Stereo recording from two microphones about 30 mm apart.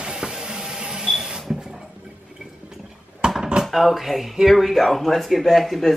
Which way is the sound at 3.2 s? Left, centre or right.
Right.